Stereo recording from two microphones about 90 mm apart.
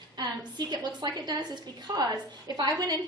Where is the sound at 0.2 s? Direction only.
50° right (ahead or behind).